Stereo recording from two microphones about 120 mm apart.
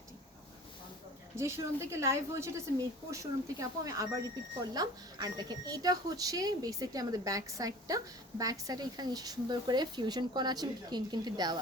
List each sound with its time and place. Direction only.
1.4 s a woman's voice: 25° right (ahead or behind)